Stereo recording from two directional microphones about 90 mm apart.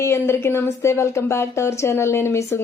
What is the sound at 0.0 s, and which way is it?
Speech, 30° left (ahead or behind).